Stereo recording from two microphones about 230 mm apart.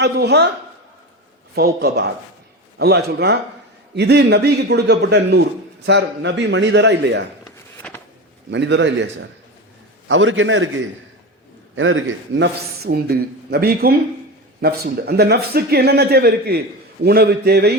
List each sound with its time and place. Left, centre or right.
0.0 s a man's voice: right
1.5 s a man's voice: right
7.8 s a sound: centre
8.4 s a man's voice: right